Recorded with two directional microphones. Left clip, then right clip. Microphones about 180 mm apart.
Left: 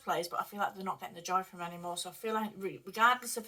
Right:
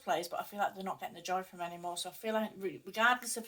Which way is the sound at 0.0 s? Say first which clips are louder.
Left 1 dB; 20° right (ahead or behind).